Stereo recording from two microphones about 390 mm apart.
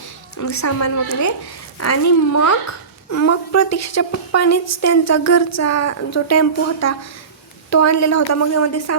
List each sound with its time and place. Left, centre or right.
0.3 s a woman's voice: left